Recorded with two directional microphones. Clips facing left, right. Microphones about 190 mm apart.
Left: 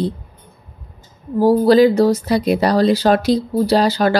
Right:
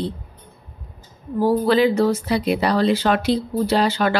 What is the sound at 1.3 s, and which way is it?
Speech, 40° left (ahead or behind).